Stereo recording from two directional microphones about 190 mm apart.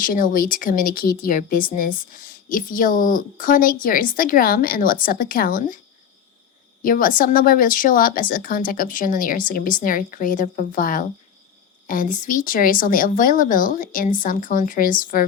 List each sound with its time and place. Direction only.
0.0 s speech: 45° left (ahead or behind)
6.8 s speech: 45° left (ahead or behind)